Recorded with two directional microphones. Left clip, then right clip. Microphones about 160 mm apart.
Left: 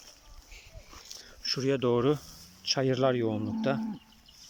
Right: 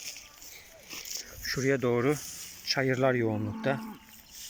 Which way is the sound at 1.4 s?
5° left (ahead or behind).